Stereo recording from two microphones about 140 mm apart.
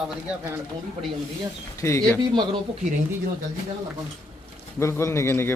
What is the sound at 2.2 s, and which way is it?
Speech, 30° right (ahead or behind).